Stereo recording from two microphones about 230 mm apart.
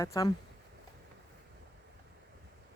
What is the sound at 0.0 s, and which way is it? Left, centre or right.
Speech, centre.